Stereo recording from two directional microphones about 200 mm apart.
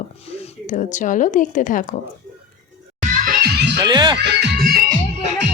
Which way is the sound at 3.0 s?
40° right (ahead or behind).